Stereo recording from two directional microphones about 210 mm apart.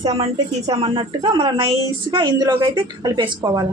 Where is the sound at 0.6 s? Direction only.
20° right (ahead or behind).